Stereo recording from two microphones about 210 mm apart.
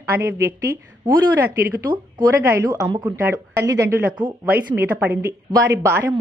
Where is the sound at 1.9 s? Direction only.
20° right (ahead or behind).